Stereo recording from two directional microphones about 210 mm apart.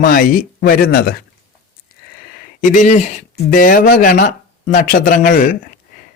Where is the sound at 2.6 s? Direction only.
35° left (ahead or behind).